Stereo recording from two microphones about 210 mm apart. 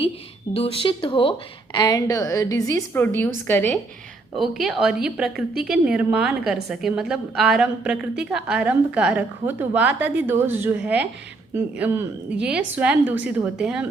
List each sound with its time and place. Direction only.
0.5 s speech: 25° left (ahead or behind); by 3.8 s 10° left (ahead or behind)
4.4 s a woman's voice: centre (ahead or behind)